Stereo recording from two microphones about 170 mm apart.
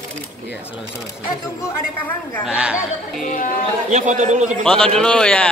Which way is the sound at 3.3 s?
50° left (ahead or behind).